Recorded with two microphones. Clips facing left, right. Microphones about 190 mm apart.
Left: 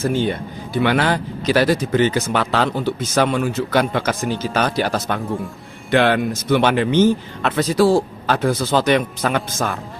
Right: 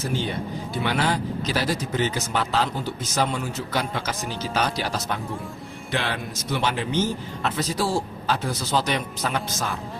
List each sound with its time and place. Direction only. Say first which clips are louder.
0.0 s speech: left 8 dB; 55° left (ahead or behind)
0.8 s speech: left 7 dB; 70° left (ahead or behind); by 9.7 s 55° left (ahead or behind)